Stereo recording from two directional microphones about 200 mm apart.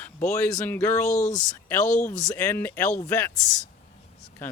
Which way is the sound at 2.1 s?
20° left (ahead or behind).